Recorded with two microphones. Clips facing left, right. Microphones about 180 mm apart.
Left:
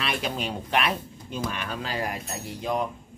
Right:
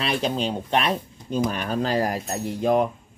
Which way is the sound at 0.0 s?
30° right (ahead or behind).